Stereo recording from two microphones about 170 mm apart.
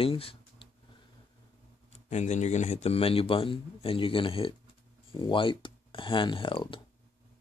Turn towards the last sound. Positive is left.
turn(degrees=30)  # may be behind; listen again after turning